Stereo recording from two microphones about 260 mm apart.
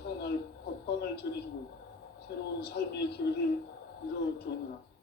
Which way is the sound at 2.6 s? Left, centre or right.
Left.